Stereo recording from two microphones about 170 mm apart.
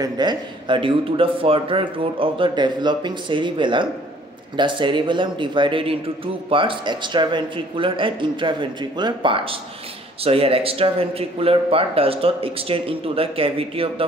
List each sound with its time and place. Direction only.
0.0 s speech: 25° right (ahead or behind)